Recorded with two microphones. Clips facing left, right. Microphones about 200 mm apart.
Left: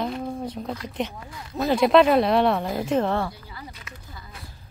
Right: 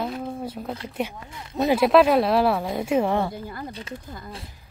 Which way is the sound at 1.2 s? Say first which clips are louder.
Right 1 dB; 25° right (ahead or behind).